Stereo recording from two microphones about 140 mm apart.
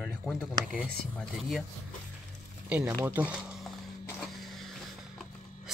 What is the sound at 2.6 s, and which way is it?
Speech, 10° right (ahead or behind).